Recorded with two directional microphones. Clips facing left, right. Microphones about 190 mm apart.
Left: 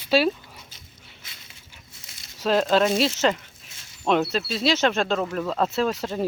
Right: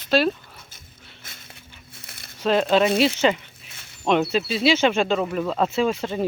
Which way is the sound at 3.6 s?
60° right (ahead or behind).